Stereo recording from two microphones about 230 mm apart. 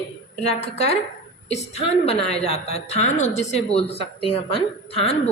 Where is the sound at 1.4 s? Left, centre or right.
Left.